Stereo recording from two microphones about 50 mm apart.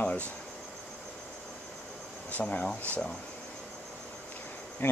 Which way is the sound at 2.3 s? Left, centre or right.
Left.